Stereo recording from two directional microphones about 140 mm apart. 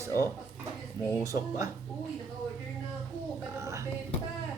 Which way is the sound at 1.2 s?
25° right (ahead or behind).